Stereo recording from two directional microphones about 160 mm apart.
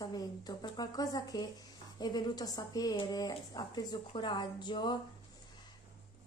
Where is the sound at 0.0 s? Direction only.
25° left (ahead or behind).